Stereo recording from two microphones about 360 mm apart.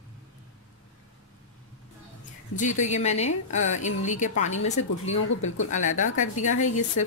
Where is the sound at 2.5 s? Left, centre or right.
Centre.